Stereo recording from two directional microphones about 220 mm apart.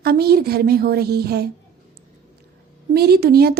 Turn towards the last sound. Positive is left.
turn(degrees=-45)  # may be behind; listen again after turning